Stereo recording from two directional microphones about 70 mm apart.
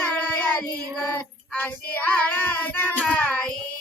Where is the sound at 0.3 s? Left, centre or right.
Left.